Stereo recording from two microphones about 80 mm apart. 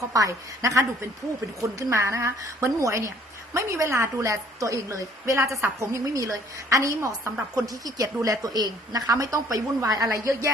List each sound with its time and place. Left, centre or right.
0.1 s a woman's voice: right